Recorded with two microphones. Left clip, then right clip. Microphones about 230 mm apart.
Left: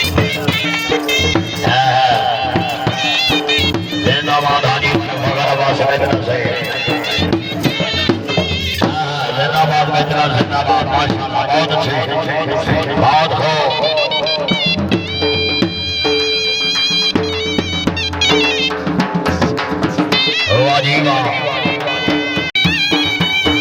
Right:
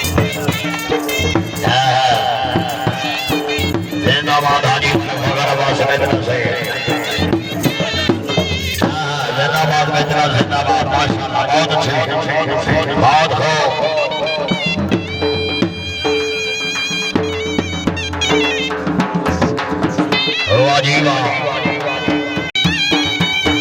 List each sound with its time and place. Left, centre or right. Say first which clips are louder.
1.7 s music: left 1 dB; centre
3.2 s music: left 4 dB; centre
4.1 s music: right 1 dB; centre
7.6 s music: left 2 dB; centre
9.4 s a sound: left 1 dB; centre
20.1 s music: left 2 dB; centre
20.7 s a sound: even; centre
22.5 s music: even; centre